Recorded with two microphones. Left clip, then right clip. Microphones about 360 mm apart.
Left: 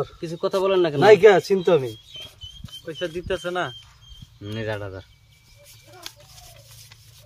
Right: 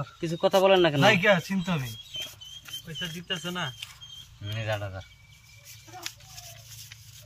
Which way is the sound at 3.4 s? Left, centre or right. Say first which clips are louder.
Left 7 dB; centre.